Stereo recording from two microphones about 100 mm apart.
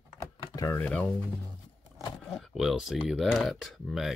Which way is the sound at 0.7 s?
15° left (ahead or behind).